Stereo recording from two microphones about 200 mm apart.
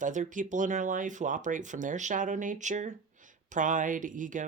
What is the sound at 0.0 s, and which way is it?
Speech, 40° right (ahead or behind).